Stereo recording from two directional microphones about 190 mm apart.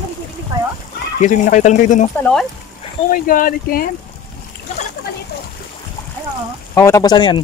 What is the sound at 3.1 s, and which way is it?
Speech, 50° left (ahead or behind).